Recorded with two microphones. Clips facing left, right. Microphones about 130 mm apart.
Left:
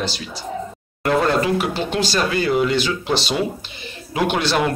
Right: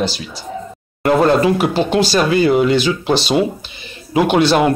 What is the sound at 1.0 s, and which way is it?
Speech, 25° right (ahead or behind).